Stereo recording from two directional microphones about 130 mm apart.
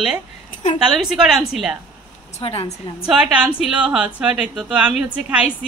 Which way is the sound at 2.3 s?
50° left (ahead or behind).